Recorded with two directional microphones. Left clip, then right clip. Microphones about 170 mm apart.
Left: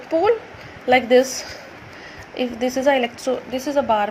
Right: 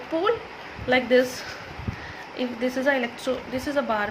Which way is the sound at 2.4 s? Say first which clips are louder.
Left 5 dB; 25° left (ahead or behind).